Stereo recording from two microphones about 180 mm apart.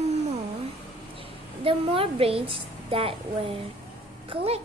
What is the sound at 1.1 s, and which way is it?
A woman's voice, 30° right (ahead or behind).